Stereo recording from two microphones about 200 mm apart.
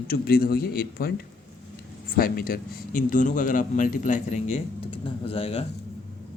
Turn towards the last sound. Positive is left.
turn(degrees=30)  # may be behind; listen again after turning